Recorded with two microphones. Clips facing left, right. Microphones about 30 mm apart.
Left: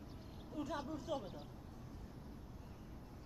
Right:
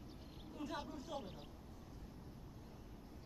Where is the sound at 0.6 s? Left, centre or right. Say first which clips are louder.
Left 3 dB; centre.